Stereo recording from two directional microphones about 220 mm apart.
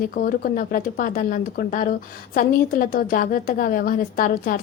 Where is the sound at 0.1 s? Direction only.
40° left (ahead or behind).